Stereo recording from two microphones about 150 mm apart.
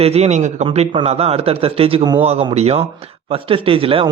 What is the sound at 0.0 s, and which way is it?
A man's voice, 45° right (ahead or behind).